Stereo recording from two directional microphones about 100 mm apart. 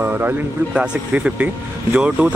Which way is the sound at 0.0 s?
20° right (ahead or behind).